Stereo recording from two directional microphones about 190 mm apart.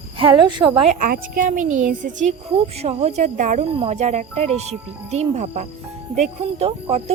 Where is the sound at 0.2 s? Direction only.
25° right (ahead or behind).